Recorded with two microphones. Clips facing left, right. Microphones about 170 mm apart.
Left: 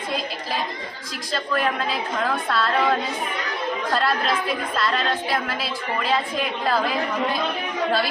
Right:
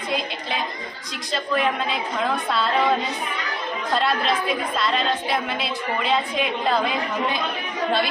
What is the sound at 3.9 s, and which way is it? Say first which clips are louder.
A woman's voice: right 2 dB; centre (ahead or behind).